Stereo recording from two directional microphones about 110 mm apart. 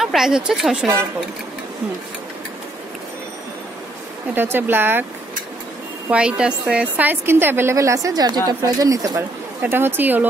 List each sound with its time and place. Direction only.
0.0 s speech: 5° right (ahead or behind)
4.4 s a woman's voice: 20° right (ahead or behind)
6.0 s a woman's voice: 10° right (ahead or behind); by 9.2 s 30° right (ahead or behind)
9.6 s speech: 20° right (ahead or behind)